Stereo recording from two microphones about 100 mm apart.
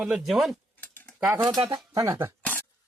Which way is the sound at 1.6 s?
45° right (ahead or behind).